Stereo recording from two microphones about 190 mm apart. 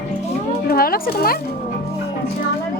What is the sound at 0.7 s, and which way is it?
Speech, 50° left (ahead or behind).